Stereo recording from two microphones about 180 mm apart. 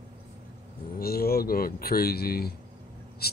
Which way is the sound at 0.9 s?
55° left (ahead or behind).